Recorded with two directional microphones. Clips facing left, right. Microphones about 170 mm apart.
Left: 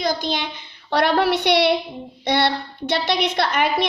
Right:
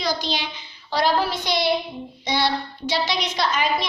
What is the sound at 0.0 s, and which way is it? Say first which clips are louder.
A child's voice: left 3 dB; 50° left (ahead or behind).